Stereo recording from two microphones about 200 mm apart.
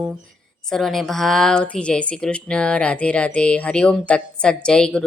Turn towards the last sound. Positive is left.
turn(degrees=5)  # may be behind; listen again after turning